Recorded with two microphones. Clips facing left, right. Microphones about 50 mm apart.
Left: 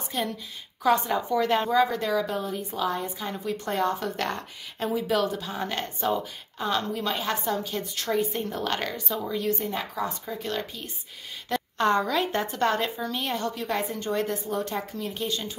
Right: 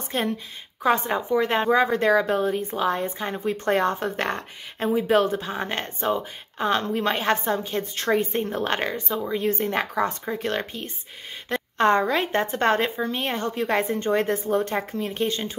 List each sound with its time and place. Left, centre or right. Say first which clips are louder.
0.1 s speech: right 3 dB; right
0.8 s speech: right 1 dB; right